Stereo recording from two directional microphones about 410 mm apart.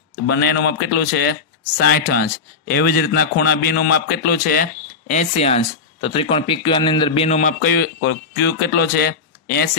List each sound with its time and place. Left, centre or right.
0.3 s a man's voice: left